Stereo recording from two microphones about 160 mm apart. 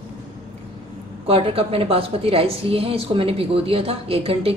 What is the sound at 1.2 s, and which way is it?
A woman's voice, 35° right (ahead or behind).